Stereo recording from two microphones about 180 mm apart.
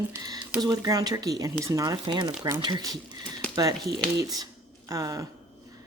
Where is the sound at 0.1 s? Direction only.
20° right (ahead or behind).